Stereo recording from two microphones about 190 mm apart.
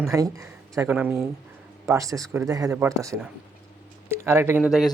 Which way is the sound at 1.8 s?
15° right (ahead or behind).